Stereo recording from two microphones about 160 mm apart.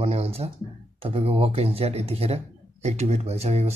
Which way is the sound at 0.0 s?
40° right (ahead or behind).